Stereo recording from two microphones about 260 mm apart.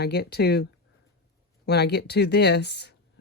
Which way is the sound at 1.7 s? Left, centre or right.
Left.